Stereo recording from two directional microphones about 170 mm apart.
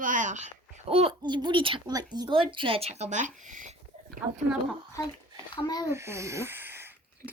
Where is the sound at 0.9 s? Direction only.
30° right (ahead or behind).